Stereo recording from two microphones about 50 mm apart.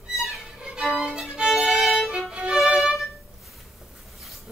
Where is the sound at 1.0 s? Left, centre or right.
Centre.